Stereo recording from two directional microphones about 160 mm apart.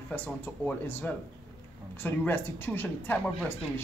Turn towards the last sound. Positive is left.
turn(degrees=10)  # may be behind; listen again after turning